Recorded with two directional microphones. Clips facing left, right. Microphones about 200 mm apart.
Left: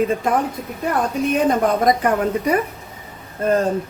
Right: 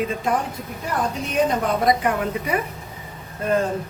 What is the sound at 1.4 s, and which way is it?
A woman's voice, 45° left (ahead or behind).